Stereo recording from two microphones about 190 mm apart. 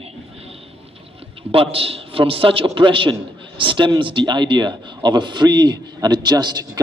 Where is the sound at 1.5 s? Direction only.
30° right (ahead or behind).